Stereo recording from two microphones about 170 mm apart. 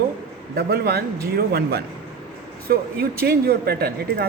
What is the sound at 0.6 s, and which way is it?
Speech, 65° right (ahead or behind).